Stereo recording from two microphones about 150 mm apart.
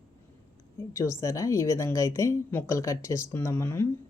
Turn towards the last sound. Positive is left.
turn(degrees=15)  # may be behind; listen again after turning